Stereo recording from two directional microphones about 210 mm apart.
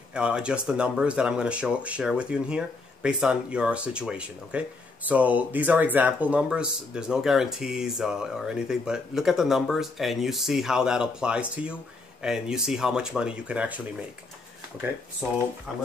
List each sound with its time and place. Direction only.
0.1 s speech: 5° right (ahead or behind)
15.7 s speech: centre (ahead or behind)